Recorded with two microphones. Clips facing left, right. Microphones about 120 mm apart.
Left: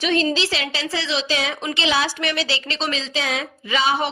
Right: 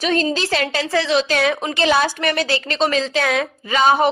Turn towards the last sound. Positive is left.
turn(degrees=-45)  # may be behind; listen again after turning